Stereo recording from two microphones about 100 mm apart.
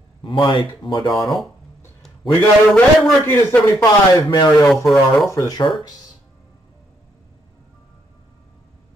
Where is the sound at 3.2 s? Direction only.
20° left (ahead or behind).